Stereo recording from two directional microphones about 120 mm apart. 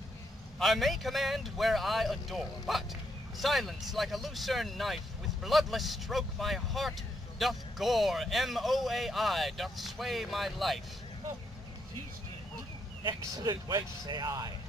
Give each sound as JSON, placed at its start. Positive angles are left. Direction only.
{"t": 0.6, "sound": "speech", "side_deg": 0}
{"t": 13.0, "sound": "speech", "side_deg": -35}